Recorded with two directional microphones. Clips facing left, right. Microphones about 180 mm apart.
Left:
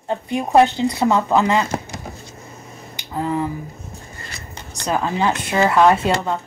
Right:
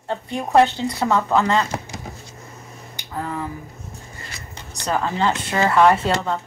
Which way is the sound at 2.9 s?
20° left (ahead or behind).